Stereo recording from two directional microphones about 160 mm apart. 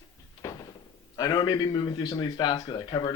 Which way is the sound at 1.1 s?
25° left (ahead or behind).